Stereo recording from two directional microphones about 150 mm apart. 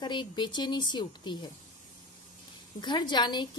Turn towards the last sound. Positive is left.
turn(degrees=30)  # may be behind; listen again after turning